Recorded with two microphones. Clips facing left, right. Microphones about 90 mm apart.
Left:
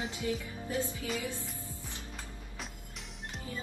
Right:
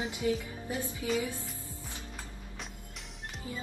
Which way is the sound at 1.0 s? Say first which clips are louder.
Right 5 dB; 20° right (ahead or behind).